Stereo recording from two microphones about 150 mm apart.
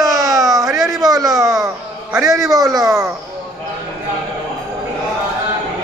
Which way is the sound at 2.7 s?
20° right (ahead or behind).